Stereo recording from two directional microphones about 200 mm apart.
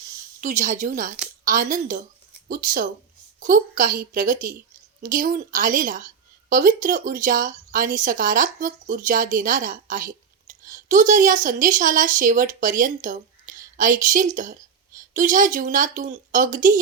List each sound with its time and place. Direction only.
0.4 s a woman's voice: 40° right (ahead or behind)